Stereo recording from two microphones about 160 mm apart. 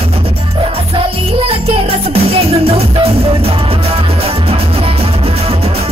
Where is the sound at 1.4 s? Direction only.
40° right (ahead or behind).